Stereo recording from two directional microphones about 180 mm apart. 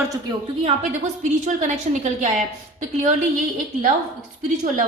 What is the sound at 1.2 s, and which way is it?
A woman's voice, 40° right (ahead or behind).